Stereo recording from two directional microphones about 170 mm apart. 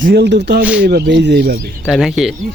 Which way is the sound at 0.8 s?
75° right (ahead or behind).